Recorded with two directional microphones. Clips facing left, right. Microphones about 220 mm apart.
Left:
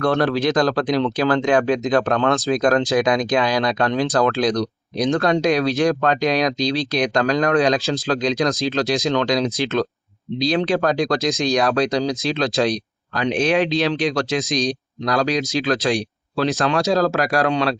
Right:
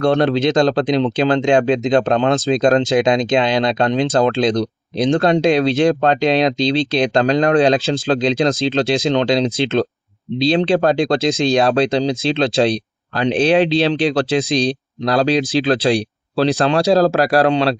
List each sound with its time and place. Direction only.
0.0 s speech: 25° right (ahead or behind)